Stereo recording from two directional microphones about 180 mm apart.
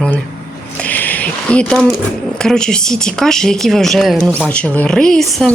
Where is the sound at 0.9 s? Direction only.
10° left (ahead or behind).